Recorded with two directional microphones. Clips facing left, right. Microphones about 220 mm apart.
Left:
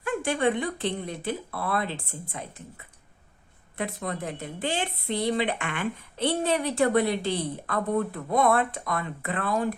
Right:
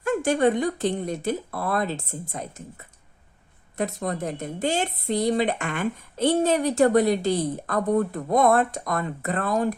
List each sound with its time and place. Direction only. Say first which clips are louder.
0.0 s a woman's voice: right 5 dB; 45° right (ahead or behind)